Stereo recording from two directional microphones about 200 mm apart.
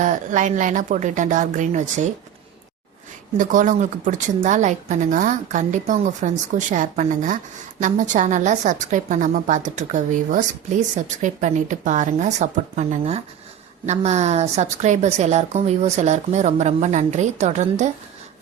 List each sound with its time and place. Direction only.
0.0 s a woman's voice: 40° right (ahead or behind)
3.3 s a woman's voice: 40° right (ahead or behind)